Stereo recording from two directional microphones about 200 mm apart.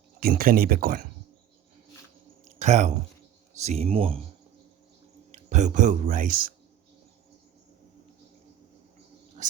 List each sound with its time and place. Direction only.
0.2 s speech: 45° right (ahead or behind)
2.4 s a sound: 35° right (ahead or behind)
3.6 s speech: 30° right (ahead or behind)
5.5 s speech: 35° right (ahead or behind)